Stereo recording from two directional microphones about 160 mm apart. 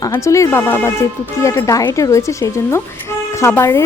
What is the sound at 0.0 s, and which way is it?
Speech, 20° left (ahead or behind).